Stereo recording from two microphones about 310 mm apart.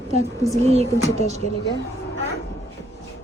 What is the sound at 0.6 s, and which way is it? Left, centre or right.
Speech, centre.